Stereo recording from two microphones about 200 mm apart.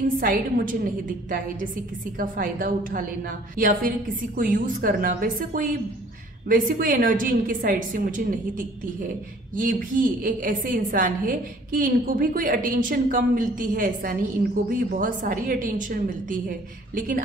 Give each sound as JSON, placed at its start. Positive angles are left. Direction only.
{"t": 0.2, "sound": "a woman's voice", "side_deg": -40}